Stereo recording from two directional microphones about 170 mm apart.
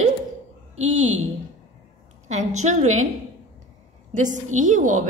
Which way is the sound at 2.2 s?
45° right (ahead or behind).